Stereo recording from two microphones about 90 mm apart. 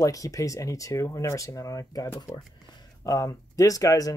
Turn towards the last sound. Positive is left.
turn(degrees=40)  # may be behind; listen again after turning